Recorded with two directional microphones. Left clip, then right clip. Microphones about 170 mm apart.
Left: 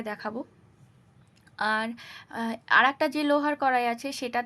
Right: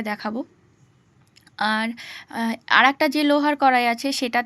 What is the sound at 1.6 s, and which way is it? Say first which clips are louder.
Speech: right 4 dB; 15° right (ahead or behind).